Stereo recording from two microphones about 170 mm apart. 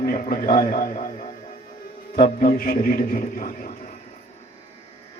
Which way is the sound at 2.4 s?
55° left (ahead or behind).